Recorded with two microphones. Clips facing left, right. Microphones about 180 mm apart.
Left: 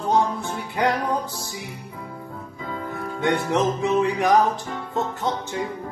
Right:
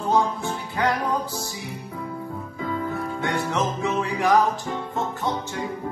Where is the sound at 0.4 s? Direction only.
15° left (ahead or behind).